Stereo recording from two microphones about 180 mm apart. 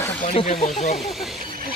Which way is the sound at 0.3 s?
35° left (ahead or behind).